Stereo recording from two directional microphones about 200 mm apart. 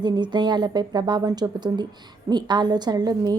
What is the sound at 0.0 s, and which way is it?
A woman's voice, 20° right (ahead or behind).